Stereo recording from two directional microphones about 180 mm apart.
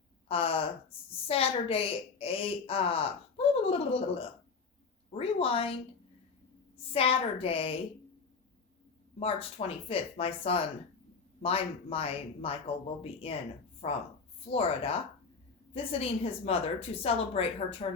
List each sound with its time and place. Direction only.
0.3 s a woman's voice: 30° left (ahead or behind)
6.9 s a woman's voice: 30° left (ahead or behind)
9.1 s a woman's voice: 30° left (ahead or behind)